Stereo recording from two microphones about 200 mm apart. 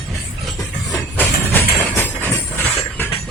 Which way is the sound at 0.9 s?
10° left (ahead or behind).